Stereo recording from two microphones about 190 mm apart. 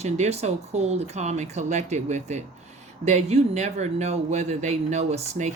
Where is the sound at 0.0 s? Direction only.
35° right (ahead or behind).